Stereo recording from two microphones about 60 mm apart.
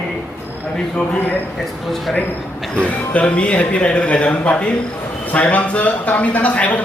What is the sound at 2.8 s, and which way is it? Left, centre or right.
Speech, left.